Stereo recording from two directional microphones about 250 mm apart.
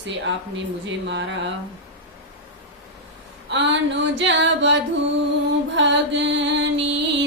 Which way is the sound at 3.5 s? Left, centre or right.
Right.